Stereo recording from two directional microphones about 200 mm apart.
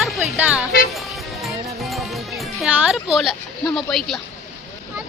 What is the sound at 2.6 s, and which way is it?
Speech, 5° right (ahead or behind).